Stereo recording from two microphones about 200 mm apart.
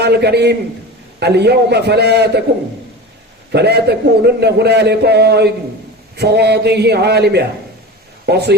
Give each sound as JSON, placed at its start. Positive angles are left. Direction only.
{"t": 0.0, "sound": "a man's voice", "side_deg": -55}
{"t": 3.5, "sound": "a man's voice", "side_deg": -55}